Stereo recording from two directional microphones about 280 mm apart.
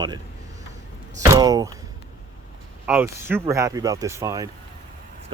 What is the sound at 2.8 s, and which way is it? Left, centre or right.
Speech, centre.